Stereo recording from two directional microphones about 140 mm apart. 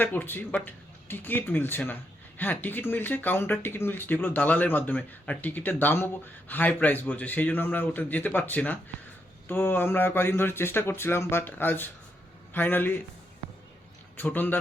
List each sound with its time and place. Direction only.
0.0 s speech: 15° left (ahead or behind)
14.2 s speech: 15° left (ahead or behind)